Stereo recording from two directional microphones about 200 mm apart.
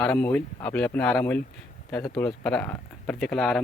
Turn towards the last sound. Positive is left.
turn(degrees=0)  # may be behind; listen again after turning